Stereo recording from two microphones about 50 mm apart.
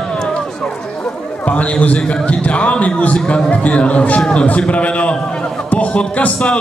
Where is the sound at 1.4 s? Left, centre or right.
Left.